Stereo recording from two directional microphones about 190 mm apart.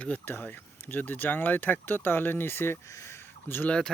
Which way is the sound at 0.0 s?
10° left (ahead or behind).